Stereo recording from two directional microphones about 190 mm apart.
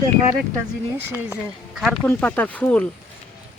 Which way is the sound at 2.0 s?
10° left (ahead or behind).